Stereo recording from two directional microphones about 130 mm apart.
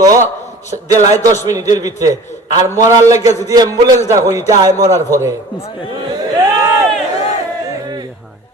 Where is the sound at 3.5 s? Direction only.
30° right (ahead or behind).